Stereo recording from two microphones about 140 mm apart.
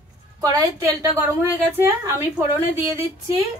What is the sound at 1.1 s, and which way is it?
A woman's voice, 15° right (ahead or behind).